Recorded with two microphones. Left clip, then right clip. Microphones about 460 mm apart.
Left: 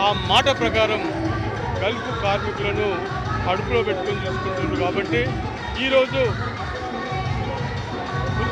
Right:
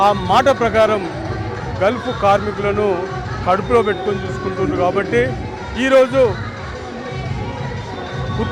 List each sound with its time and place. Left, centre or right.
0.1 s speech: right